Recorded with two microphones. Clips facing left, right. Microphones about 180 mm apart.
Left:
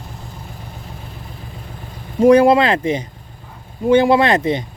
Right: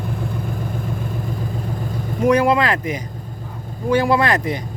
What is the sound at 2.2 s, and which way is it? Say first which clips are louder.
Speech: left 5 dB; 30° left (ahead or behind).